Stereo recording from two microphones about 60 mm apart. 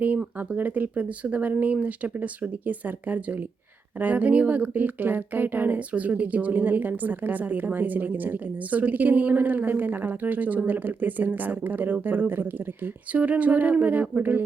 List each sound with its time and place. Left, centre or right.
0.3 s speech: right